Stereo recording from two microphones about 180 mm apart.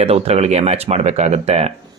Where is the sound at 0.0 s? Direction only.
35° right (ahead or behind).